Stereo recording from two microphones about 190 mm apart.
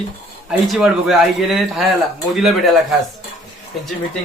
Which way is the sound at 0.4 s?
Centre (ahead or behind).